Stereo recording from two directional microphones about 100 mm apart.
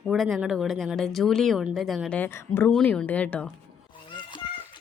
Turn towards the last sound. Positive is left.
turn(degrees=60)  # may be behind; listen again after turning